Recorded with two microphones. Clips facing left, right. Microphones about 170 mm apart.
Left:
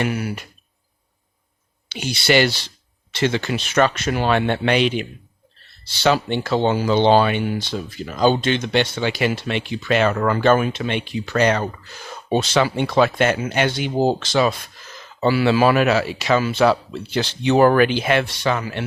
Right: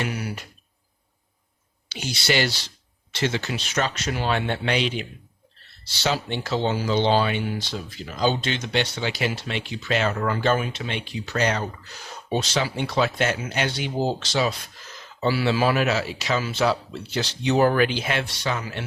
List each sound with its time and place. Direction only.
0.0 s speech: 55° left (ahead or behind)
1.9 s speech: 60° left (ahead or behind)